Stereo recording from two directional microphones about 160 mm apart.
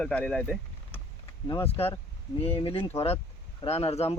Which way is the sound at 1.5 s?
35° left (ahead or behind).